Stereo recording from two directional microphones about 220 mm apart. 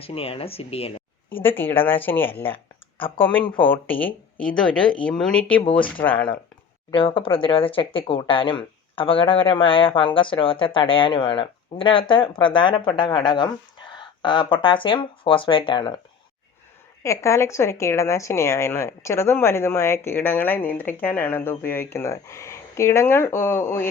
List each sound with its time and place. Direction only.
0.0 s speech: 25° left (ahead or behind)
1.3 s a woman's voice: 10° left (ahead or behind)
3.4 s speech: 20° left (ahead or behind)
3.7 s a woman's voice: 5° left (ahead or behind)
6.9 s speech: 25° left (ahead or behind)
17.0 s a woman's voice: 15° left (ahead or behind)